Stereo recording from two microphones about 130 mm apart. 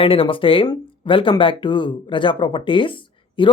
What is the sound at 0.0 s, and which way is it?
Speech, 45° left (ahead or behind).